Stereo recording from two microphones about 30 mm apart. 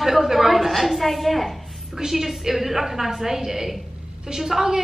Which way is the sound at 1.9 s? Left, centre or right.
Centre.